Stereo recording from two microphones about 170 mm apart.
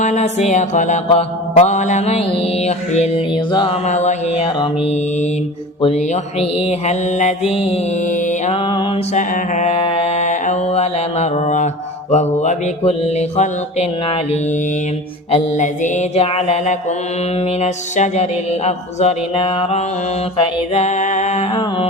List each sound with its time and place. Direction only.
0.0 s mantra: 40° left (ahead or behind)
6.4 s mantra: 40° left (ahead or behind)
9.1 s mantra: 45° left (ahead or behind)
15.3 s mantra: 45° left (ahead or behind)